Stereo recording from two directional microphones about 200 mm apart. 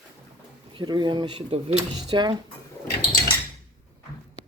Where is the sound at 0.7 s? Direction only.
20° right (ahead or behind).